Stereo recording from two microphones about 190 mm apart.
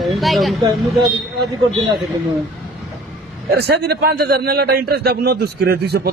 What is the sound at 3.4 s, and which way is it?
A man's voice, 55° right (ahead or behind).